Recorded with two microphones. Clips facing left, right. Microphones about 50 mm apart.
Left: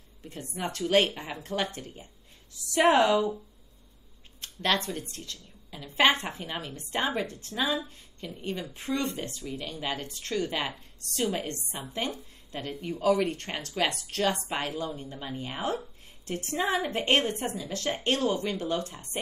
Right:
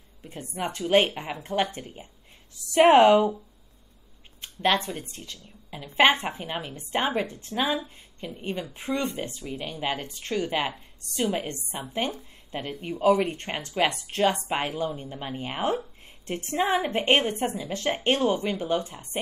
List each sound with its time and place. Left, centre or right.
0.2 s speech: centre; by 3.3 s right
4.4 s speech: right